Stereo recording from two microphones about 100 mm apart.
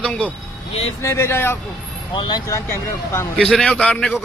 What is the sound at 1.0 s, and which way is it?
Speech, 25° left (ahead or behind).